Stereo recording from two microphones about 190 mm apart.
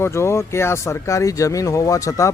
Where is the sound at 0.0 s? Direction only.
15° left (ahead or behind).